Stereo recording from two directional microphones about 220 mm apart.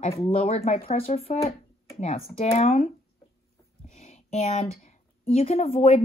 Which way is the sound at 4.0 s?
30° left (ahead or behind).